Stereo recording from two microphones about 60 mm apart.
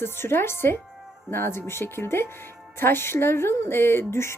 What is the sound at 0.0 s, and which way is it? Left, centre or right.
Speech, left.